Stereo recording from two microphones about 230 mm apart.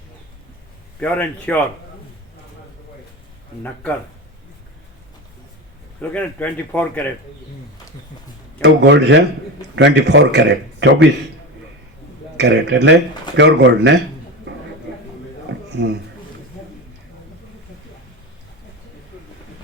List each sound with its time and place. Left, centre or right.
0.9 s a man's voice: centre
6.0 s speech: centre
8.6 s speech: right
12.4 s speech: right
14.5 s a sound: right
15.7 s speech: right